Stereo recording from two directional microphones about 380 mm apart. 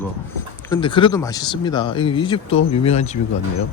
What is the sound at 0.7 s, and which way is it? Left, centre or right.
Speech, centre.